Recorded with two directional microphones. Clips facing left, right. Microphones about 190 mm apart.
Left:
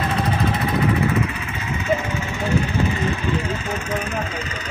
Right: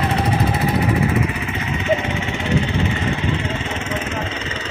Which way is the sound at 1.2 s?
20° right (ahead or behind).